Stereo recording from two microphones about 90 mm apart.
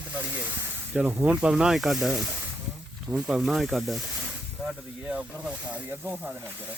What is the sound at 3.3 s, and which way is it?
Speech, centre (ahead or behind).